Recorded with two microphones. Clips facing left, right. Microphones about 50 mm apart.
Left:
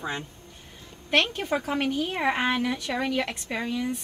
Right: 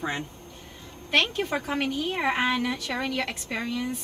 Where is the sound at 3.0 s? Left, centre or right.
Centre.